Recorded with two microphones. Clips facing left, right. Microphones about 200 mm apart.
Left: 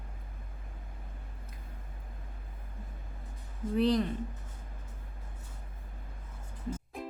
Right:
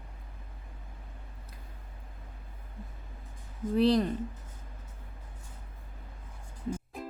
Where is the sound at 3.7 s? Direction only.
35° right (ahead or behind).